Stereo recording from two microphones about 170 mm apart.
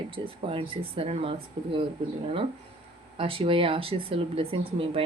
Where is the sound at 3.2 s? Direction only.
30° right (ahead or behind).